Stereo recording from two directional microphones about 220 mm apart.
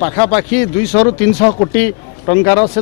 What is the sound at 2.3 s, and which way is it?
Speech, 25° left (ahead or behind).